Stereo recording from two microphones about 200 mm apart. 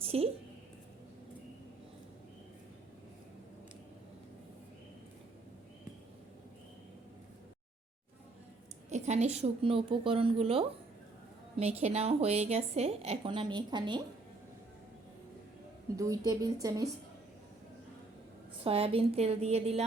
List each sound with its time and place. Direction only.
0.0 s a sound: 30° right (ahead or behind)
8.9 s a woman's voice: 35° right (ahead or behind)
16.0 s a woman's voice: 15° right (ahead or behind)
18.6 s a woman's voice: 30° right (ahead or behind)